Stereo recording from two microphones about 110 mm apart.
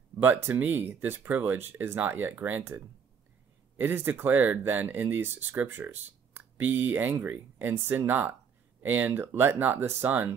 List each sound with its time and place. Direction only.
0.2 s speech: 15° right (ahead or behind)